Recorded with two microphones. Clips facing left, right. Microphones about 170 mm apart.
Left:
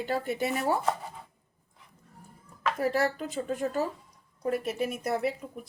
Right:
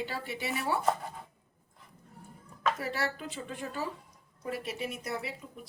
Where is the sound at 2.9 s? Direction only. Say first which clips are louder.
Left 7 dB; 45° left (ahead or behind).